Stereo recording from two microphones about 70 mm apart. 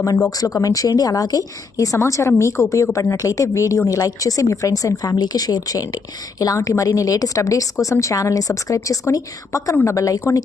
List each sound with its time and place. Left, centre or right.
0.3 s speech: left
2.0 s a woman's voice: left